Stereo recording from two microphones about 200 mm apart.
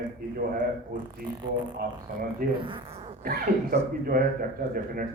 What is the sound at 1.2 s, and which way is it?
Speech, 50° right (ahead or behind).